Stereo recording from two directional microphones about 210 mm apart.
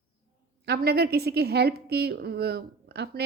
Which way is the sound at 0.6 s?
50° right (ahead or behind).